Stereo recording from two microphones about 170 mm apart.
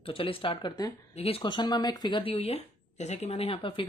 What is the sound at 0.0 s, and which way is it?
Speech, 30° left (ahead or behind).